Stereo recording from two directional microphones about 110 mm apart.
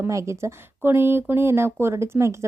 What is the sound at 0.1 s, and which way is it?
A woman's voice, 25° right (ahead or behind).